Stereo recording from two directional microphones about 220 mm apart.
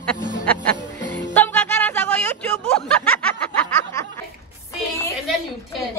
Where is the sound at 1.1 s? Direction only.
10° left (ahead or behind).